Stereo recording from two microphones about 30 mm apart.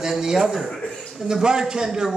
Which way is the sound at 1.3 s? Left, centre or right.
Right.